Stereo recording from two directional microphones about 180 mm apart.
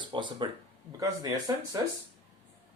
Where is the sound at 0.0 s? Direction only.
25° right (ahead or behind).